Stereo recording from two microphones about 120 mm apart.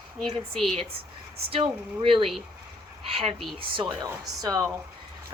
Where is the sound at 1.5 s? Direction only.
50° right (ahead or behind).